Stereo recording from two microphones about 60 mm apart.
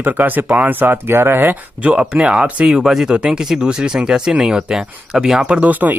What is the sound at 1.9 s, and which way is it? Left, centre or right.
Speech, centre.